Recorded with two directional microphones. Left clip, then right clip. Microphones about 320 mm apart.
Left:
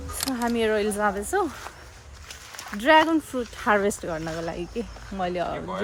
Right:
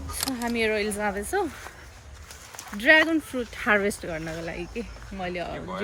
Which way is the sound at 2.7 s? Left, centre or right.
Centre.